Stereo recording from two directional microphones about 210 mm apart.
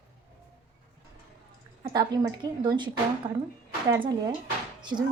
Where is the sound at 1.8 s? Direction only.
20° right (ahead or behind).